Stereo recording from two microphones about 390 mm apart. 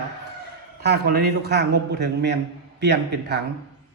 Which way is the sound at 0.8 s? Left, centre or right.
Right.